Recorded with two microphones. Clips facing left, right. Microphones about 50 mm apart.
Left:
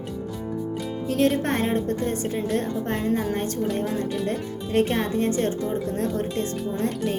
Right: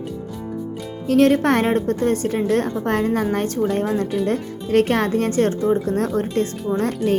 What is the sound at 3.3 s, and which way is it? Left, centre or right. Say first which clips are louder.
Speech: right 5 dB; right.